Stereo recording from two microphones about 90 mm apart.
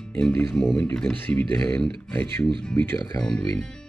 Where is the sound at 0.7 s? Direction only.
20° left (ahead or behind).